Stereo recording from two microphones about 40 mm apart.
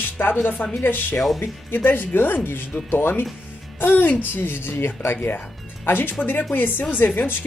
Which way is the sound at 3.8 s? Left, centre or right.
Left.